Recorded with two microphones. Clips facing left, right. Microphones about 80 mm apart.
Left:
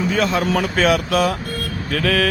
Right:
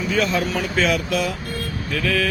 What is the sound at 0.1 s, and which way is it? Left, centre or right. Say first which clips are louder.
Speech: even; left.